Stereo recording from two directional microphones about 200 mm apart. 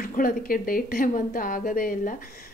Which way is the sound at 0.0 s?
45° left (ahead or behind).